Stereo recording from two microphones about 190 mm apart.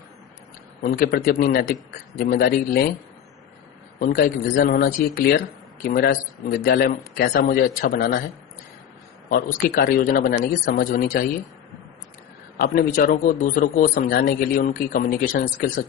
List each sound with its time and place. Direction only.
0.8 s a man's voice: 50° left (ahead or behind)
4.0 s a man's voice: 45° left (ahead or behind)
9.3 s a man's voice: 50° left (ahead or behind)
12.5 s a man's voice: 50° left (ahead or behind)